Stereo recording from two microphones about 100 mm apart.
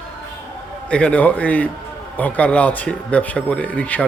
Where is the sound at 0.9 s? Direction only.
10° left (ahead or behind).